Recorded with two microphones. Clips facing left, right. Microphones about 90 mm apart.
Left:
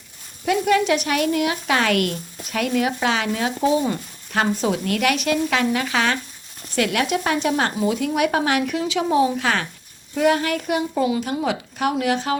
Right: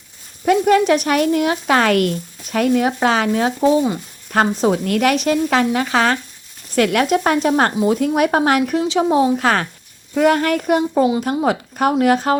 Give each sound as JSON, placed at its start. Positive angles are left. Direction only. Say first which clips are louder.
{"t": 0.4, "sound": "speech", "louder": "right 5 dB", "side_deg": -45}
{"t": 3.6, "sound": "speech", "louder": "right 4 dB", "side_deg": -30}
{"t": 4.3, "sound": "a child's voice", "louder": "right 5 dB", "side_deg": -40}
{"t": 8.8, "sound": "a child's voice", "louder": "right 4 dB", "side_deg": -30}